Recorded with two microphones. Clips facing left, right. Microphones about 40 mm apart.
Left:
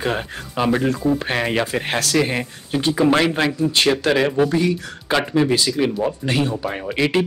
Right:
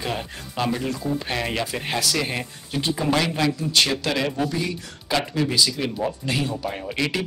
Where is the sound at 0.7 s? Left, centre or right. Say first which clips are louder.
Left 7 dB; left.